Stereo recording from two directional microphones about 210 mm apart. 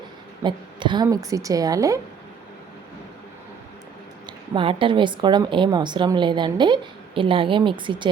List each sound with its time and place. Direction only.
0.4 s a woman's voice: 20° right (ahead or behind)
4.3 s a woman's voice: 25° right (ahead or behind)